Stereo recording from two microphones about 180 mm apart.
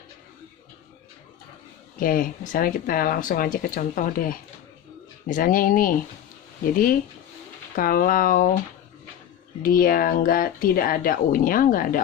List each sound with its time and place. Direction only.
2.0 s speech: 50° left (ahead or behind)
9.6 s speech: 50° left (ahead or behind)